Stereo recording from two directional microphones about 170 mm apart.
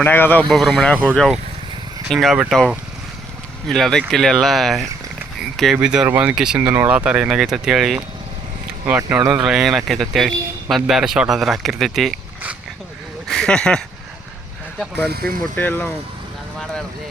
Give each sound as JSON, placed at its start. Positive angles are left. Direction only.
{"t": 0.0, "sound": "speech", "side_deg": 10}
{"t": 15.1, "sound": "speech", "side_deg": -65}
{"t": 15.5, "sound": "speech", "side_deg": 10}